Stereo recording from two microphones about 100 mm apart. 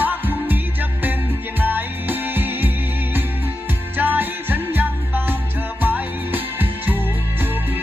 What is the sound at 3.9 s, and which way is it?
Music, 20° right (ahead or behind).